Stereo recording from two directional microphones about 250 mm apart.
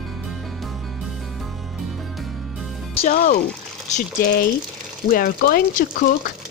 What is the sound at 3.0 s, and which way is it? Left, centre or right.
Speech, left.